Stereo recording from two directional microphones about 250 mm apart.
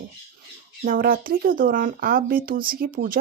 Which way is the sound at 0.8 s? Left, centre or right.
Right.